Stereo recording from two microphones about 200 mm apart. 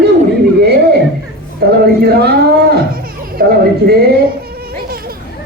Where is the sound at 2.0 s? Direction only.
55° right (ahead or behind).